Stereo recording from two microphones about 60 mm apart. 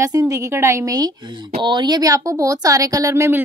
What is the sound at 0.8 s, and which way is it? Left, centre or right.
Speech, right.